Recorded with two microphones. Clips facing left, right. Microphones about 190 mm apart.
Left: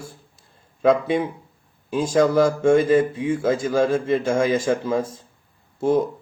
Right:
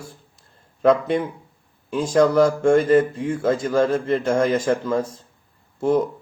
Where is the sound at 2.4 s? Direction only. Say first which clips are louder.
Even; 5° left (ahead or behind).